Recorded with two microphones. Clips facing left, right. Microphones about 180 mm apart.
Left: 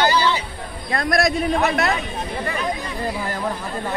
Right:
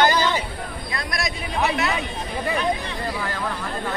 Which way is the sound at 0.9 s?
50° left (ahead or behind).